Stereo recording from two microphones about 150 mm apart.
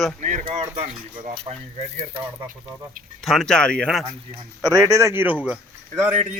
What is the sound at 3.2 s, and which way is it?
Speech, 5° left (ahead or behind).